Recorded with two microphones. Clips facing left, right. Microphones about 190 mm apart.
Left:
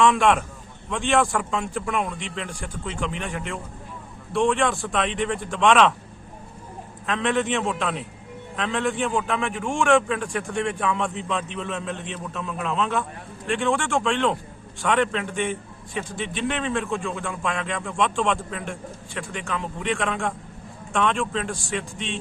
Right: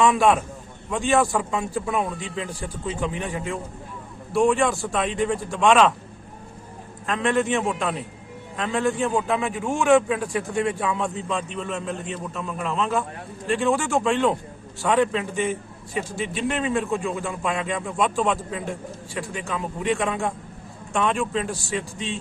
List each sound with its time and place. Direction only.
0.0 s a man's voice: 5° right (ahead or behind)
1.2 s speech: 20° right (ahead or behind)
1.5 s a man's voice: 5° right (ahead or behind)
7.1 s a man's voice: centre (ahead or behind)
16.8 s speech: 15° right (ahead or behind)
17.2 s a man's voice: 5° right (ahead or behind)
18.3 s speech: 15° right (ahead or behind)
19.1 s a man's voice: 5° right (ahead or behind)
21.2 s speech: 15° right (ahead or behind)
21.5 s a man's voice: 5° right (ahead or behind)